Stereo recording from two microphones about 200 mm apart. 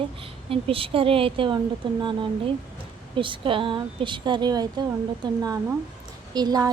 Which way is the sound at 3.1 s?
25° right (ahead or behind).